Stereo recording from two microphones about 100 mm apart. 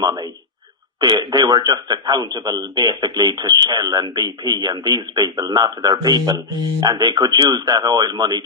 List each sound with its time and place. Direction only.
0.0 s a man's voice: 45° right (ahead or behind)